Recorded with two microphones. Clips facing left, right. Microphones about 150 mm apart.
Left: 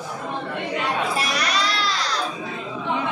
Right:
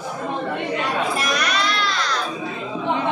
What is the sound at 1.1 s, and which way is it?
Music, 30° left (ahead or behind).